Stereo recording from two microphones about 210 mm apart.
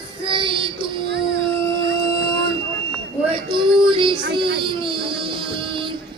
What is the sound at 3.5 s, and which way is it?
Child singing, 25° right (ahead or behind).